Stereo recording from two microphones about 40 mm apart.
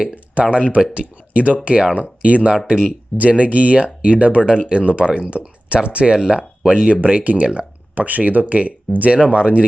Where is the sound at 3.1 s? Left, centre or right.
Right.